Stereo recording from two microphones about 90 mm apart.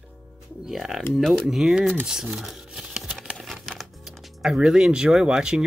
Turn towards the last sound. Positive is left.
turn(degrees=-10)  # may be behind; listen again after turning